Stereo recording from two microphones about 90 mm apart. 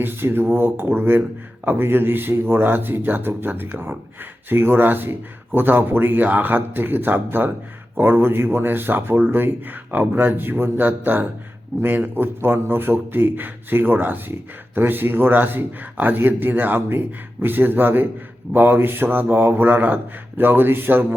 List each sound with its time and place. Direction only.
0.0 s speech: 25° right (ahead or behind)